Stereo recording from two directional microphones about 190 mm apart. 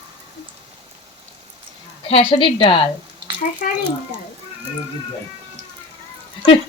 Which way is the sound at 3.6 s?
45° left (ahead or behind).